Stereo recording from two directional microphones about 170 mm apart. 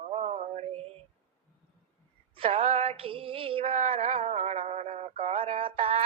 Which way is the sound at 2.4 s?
35° right (ahead or behind).